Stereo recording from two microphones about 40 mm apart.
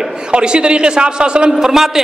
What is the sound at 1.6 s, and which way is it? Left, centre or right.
Speech, centre.